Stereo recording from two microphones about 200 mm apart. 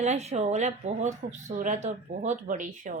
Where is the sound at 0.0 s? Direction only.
35° right (ahead or behind).